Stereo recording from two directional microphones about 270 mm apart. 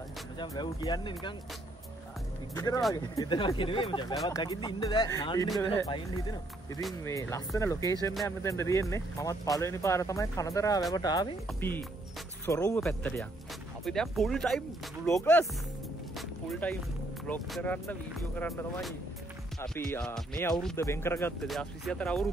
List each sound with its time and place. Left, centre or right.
0.4 s speech: centre
2.5 s speech: centre
6.8 s speech: centre
7.2 s speech: centre
8.1 s speech: centre
8.4 s speech: centre
16.2 s music: centre
17.3 s speech: centre